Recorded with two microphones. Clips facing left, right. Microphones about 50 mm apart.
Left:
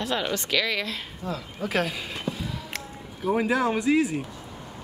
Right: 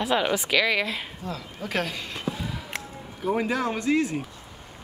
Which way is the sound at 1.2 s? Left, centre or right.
Centre.